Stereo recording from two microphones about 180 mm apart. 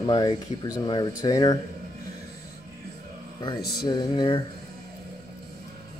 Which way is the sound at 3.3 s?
25° left (ahead or behind).